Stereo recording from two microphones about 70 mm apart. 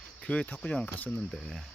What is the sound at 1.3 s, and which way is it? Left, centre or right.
Speech, centre.